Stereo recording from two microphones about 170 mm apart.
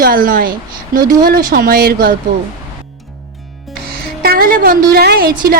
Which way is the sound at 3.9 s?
65° right (ahead or behind).